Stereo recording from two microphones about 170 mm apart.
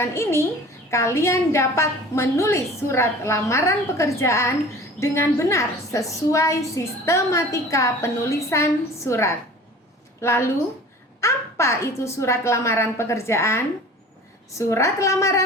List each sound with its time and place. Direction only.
0.0 s a woman's voice: 15° left (ahead or behind)
14.6 s a woman's voice: 15° left (ahead or behind)